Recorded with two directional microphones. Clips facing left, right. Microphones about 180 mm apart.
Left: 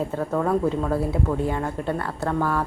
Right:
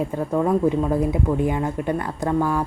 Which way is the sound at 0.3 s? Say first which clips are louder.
Right 3 dB; 15° right (ahead or behind).